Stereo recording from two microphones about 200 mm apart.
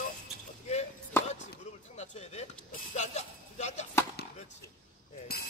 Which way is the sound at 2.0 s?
35° left (ahead or behind).